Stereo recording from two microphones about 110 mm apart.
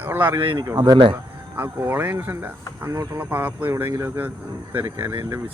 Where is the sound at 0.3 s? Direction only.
50° right (ahead or behind).